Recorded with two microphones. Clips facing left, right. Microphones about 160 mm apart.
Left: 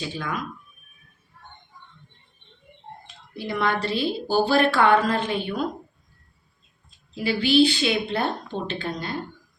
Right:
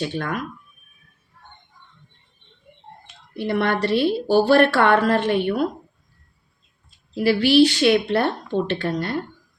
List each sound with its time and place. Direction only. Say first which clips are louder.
0.0 s speech: right 4 dB; 65° right (ahead or behind)
3.3 s a woman's voice: right 4 dB; 65° right (ahead or behind)
7.2 s a woman's voice: right 4 dB; 70° right (ahead or behind)